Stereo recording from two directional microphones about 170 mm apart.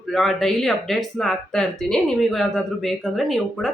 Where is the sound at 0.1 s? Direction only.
Centre (ahead or behind).